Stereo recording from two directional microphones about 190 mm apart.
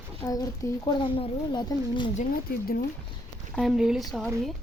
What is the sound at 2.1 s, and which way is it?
Speech, 50° left (ahead or behind).